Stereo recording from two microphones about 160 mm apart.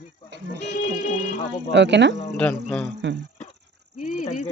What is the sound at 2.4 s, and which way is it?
Speech, 10° left (ahead or behind).